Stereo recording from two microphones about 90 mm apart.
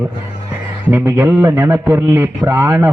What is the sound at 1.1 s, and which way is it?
A man's voice, 25° right (ahead or behind).